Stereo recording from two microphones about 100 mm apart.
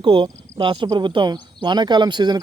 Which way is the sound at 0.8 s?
45° right (ahead or behind).